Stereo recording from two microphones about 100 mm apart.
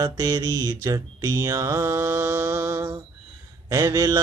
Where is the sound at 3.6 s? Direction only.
40° right (ahead or behind).